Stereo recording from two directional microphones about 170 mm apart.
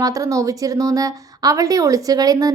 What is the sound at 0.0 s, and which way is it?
A woman's voice, 20° right (ahead or behind).